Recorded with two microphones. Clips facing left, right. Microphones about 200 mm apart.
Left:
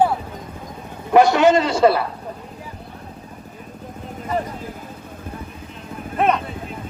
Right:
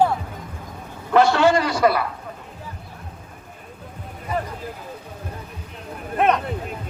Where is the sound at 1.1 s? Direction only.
15° left (ahead or behind).